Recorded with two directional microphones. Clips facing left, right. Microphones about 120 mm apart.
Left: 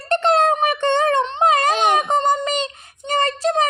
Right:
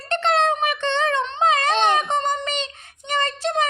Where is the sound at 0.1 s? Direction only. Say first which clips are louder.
Left 4 dB; 40° left (ahead or behind).